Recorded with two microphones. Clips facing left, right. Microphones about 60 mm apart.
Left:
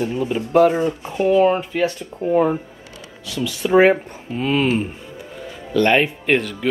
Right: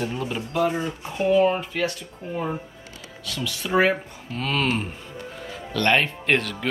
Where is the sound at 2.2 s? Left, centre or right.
Left.